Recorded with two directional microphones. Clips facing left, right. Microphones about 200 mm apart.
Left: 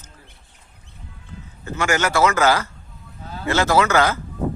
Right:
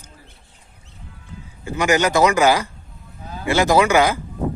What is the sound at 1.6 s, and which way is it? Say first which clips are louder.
A man's voice: right 4 dB; 15° right (ahead or behind).